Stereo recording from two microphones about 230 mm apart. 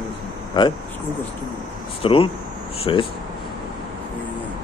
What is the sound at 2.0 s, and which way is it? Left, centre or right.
Speech, left.